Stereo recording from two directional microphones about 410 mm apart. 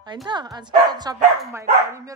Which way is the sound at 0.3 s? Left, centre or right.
Centre.